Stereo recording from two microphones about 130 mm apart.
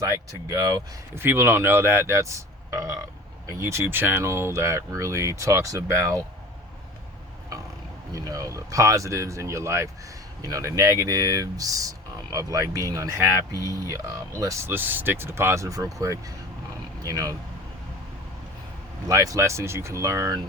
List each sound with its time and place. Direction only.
0.0 s speech: 25° right (ahead or behind)
8.1 s speech: 25° right (ahead or behind)
19.0 s speech: 25° right (ahead or behind)